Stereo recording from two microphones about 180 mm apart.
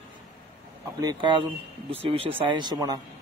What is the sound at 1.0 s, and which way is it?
A man's voice, 25° right (ahead or behind).